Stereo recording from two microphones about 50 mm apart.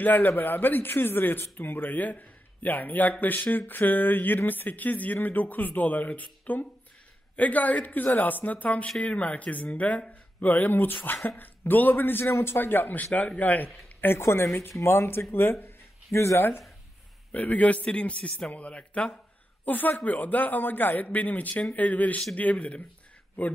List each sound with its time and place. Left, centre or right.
0.0 s a man's voice: left
14.0 s speech: left
14.7 s speech: left
16.1 s speech: left
16.3 s speech: left
17.3 s a man's voice: left
19.6 s a man's voice: left